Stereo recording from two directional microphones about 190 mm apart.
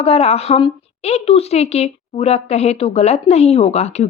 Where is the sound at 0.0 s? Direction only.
35° left (ahead or behind).